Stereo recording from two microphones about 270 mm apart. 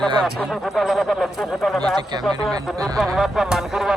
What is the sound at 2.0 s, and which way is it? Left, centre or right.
A man's voice, centre.